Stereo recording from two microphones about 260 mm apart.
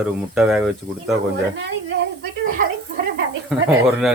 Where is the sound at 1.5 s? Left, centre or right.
Right.